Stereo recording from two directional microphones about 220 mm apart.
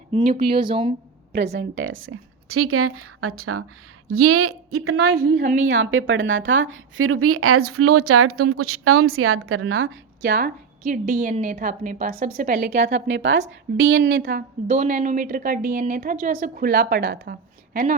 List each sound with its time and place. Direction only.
0.3 s speech: 25° right (ahead or behind)
0.9 s a sound: 45° right (ahead or behind)
1.5 s speech: 60° right (ahead or behind)
5.3 s a woman's voice: 35° right (ahead or behind)
5.6 s a woman's voice: 60° right (ahead or behind)
14.7 s a woman's voice: 35° right (ahead or behind)